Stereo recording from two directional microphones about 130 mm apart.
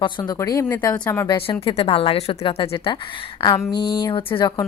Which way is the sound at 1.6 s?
50° left (ahead or behind).